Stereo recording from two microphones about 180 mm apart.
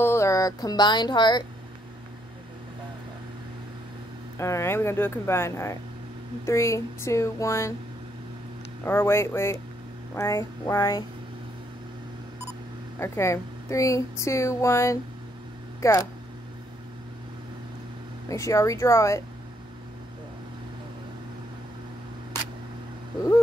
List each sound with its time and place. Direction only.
0.0 s speech: 15° left (ahead or behind)
4.4 s speech: 15° left (ahead or behind)
8.8 s speech: 15° left (ahead or behind)
13.0 s speech: 15° left (ahead or behind)
18.3 s speech: 15° left (ahead or behind)